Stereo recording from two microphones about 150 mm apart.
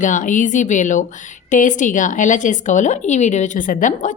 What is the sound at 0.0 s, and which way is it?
A woman's voice, 60° left (ahead or behind).